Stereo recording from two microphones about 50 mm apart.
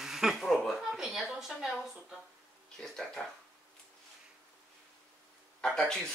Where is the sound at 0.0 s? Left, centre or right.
Centre.